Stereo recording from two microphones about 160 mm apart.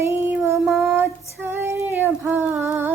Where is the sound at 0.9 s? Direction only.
15° right (ahead or behind).